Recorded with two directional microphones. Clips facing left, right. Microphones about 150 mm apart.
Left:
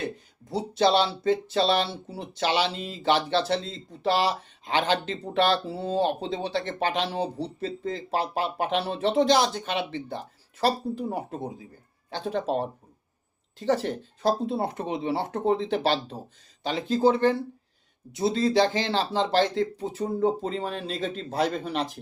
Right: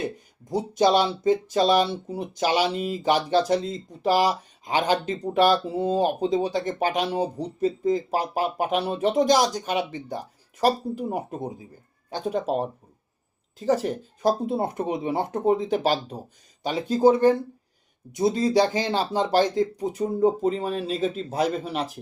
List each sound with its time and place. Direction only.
0.8 s speech: 15° right (ahead or behind)
13.8 s speech: 15° right (ahead or behind)
18.3 s speech: 15° right (ahead or behind)